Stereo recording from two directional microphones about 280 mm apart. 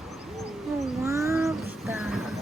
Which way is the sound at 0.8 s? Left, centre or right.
Centre.